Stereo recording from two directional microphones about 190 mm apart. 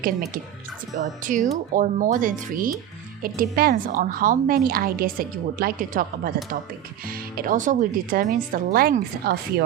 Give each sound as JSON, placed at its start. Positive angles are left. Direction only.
{"t": 0.9, "sound": "speech", "side_deg": -40}